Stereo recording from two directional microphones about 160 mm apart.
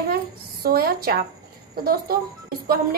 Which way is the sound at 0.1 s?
70° right (ahead or behind).